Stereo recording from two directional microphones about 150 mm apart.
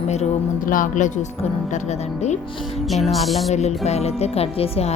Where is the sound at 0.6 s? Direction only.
65° left (ahead or behind).